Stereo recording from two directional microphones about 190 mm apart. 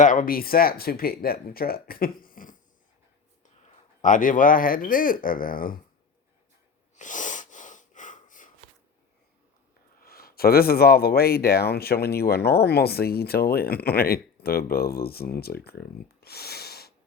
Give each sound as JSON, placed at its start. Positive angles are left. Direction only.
{"t": 0.0, "sound": "speech", "side_deg": 45}
{"t": 4.0, "sound": "speech", "side_deg": 45}
{"t": 6.9, "sound": "wheeze", "side_deg": 40}
{"t": 10.0, "sound": "speech", "side_deg": 50}